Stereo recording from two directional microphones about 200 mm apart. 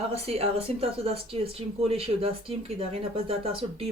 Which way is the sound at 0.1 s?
30° right (ahead or behind).